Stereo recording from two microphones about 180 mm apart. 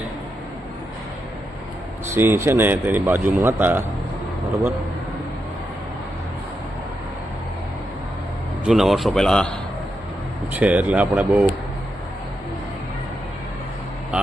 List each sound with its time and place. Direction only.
2.1 s speech: 15° right (ahead or behind)
8.6 s a man's voice: centre (ahead or behind)
10.5 s speech: 10° right (ahead or behind)